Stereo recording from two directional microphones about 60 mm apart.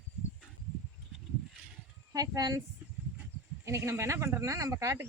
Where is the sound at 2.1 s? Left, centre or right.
Right.